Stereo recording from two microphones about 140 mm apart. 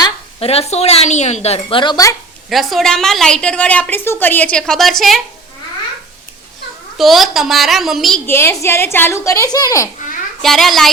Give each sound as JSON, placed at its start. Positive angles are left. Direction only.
{"t": 0.3, "sound": "speech", "side_deg": 45}
{"t": 2.5, "sound": "a woman's voice", "side_deg": 0}
{"t": 6.9, "sound": "a woman's voice", "side_deg": 0}
{"t": 8.3, "sound": "speech", "side_deg": 20}
{"t": 10.4, "sound": "a woman's voice", "side_deg": 0}